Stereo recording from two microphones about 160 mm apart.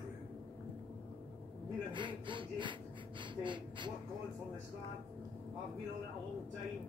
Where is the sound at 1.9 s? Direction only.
30° right (ahead or behind).